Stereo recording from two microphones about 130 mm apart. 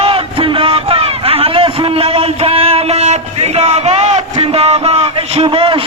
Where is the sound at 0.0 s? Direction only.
45° right (ahead or behind).